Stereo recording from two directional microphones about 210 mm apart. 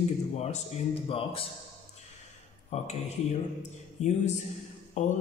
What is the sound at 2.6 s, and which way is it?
A man's voice, 30° left (ahead or behind).